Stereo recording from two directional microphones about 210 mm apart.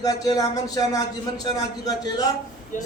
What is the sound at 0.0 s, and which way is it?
Speech, 15° left (ahead or behind).